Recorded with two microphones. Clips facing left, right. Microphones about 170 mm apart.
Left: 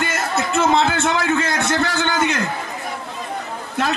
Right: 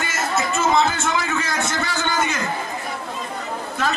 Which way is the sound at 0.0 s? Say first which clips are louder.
Left 2 dB; 60° left (ahead or behind).